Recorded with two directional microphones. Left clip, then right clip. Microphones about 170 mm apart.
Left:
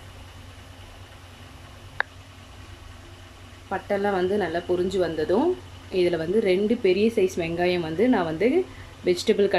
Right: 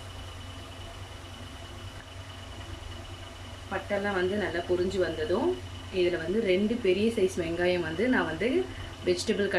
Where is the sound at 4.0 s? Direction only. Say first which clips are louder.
Left 6 dB; 30° left (ahead or behind).